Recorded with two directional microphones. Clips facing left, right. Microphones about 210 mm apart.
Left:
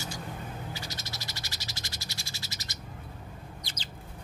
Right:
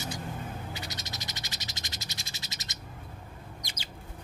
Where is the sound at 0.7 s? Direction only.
20° right (ahead or behind).